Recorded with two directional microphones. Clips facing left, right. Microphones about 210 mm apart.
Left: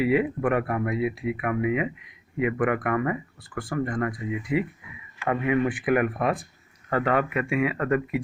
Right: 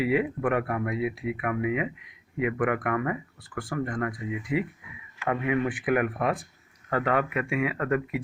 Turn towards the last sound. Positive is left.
turn(degrees=30)  # may be behind; listen again after turning